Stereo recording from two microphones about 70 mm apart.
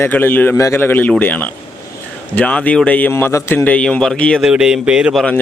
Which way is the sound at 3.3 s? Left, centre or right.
Left.